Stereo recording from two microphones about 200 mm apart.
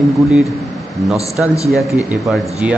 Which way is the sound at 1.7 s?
Centre (ahead or behind).